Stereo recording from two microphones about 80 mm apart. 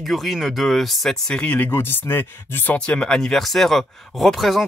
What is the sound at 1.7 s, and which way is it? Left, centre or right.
Speech, left.